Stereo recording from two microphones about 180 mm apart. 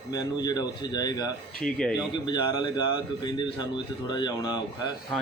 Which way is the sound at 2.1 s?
25° left (ahead or behind).